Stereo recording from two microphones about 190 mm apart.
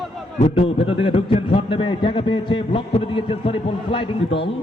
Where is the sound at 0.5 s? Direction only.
30° left (ahead or behind).